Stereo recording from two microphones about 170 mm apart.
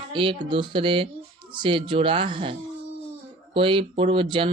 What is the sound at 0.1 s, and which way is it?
Speech, 30° right (ahead or behind).